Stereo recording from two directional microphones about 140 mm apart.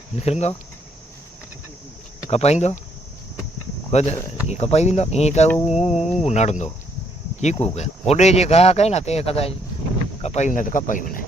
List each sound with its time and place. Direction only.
0.2 s speech: 50° left (ahead or behind)
2.3 s speech: 50° left (ahead or behind)
3.9 s speech: 50° left (ahead or behind); by 11.3 s 75° left (ahead or behind)